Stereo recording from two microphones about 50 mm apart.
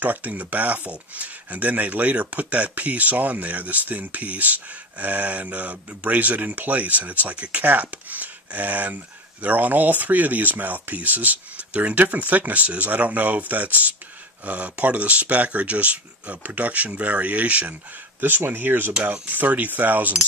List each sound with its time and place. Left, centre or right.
0.0 s speech: right
17.9 s speech: right